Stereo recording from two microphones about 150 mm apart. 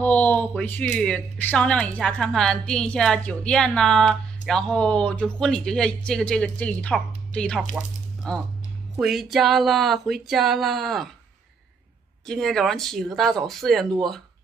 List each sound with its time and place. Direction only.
0.0 s speech: 10° left (ahead or behind)
12.3 s speech: centre (ahead or behind)